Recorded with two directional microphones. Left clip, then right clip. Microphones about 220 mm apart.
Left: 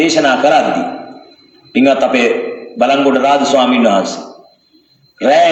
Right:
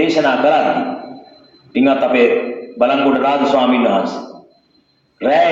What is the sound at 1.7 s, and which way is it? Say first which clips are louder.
A man's voice: left 2 dB; 40° left (ahead or behind).